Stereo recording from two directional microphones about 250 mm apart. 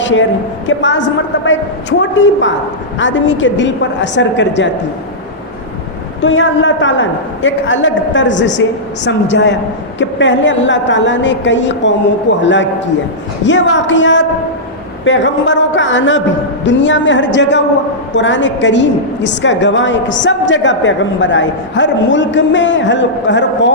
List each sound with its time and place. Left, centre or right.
0.0 s a woman's voice: left
6.2 s a woman's voice: left